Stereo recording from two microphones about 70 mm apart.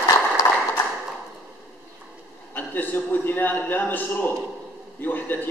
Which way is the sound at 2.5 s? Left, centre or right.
Left.